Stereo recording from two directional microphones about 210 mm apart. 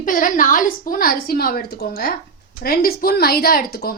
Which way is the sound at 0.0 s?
40° left (ahead or behind).